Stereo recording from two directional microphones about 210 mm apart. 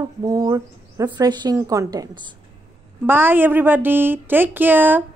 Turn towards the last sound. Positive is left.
turn(degrees=-10)  # may be behind; listen again after turning